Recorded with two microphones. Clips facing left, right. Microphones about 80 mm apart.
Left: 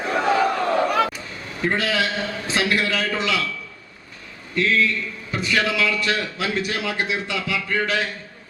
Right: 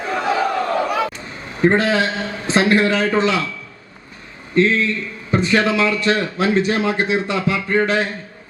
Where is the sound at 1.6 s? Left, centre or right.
Right.